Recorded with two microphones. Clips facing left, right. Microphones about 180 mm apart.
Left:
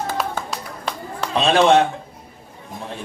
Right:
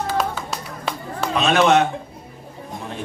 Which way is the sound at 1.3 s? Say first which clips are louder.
Left 1 dB; 30° left (ahead or behind).